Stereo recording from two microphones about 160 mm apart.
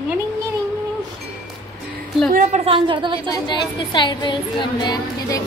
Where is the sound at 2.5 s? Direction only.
35° right (ahead or behind).